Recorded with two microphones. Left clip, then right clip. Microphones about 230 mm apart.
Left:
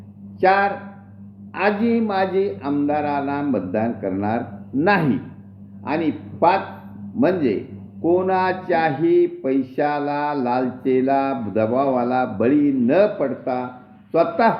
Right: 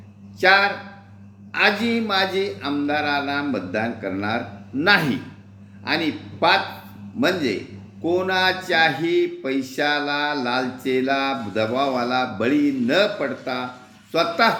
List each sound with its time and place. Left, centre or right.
0.3 s a man's voice: centre
7.2 s speech: centre